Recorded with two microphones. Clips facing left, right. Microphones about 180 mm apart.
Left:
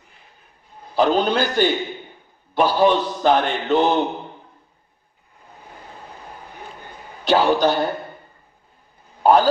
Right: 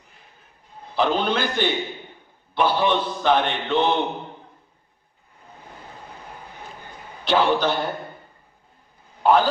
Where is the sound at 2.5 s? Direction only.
40° left (ahead or behind).